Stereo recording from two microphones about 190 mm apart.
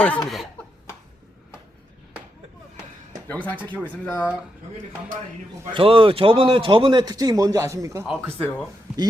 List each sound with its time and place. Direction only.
0.0 s speech: 5° left (ahead or behind)
3.2 s speech: 10° left (ahead or behind)
5.7 s speech: 30° right (ahead or behind)
8.0 s speech: 5° left (ahead or behind)